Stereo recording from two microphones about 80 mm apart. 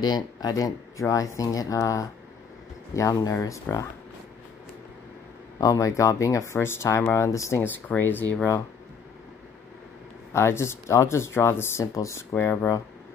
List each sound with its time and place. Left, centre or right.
0.0 s speech: left
5.6 s speech: left
7.6 s speech: left
10.3 s speech: left